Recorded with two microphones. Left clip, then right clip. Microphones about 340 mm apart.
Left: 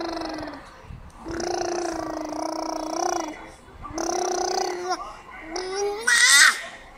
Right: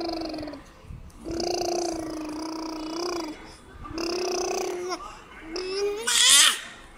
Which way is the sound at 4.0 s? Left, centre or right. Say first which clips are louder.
Left 3 dB; centre.